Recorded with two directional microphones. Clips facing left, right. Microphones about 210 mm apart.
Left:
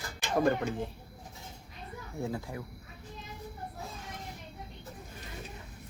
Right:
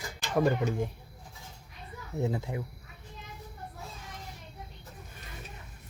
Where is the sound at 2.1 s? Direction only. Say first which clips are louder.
Right 4 dB; 20° right (ahead or behind).